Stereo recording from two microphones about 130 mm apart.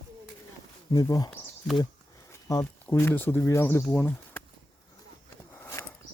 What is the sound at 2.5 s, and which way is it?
Speech, 25° left (ahead or behind).